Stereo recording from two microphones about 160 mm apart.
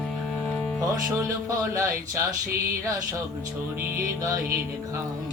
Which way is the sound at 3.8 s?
20° right (ahead or behind).